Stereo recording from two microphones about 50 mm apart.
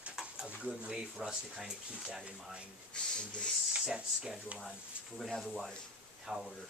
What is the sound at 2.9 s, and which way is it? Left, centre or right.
Speech, centre.